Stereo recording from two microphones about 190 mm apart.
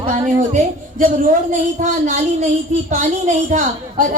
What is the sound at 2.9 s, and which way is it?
A woman's voice, 40° right (ahead or behind).